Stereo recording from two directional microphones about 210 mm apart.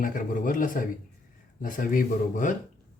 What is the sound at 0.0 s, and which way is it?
Speech, 40° left (ahead or behind).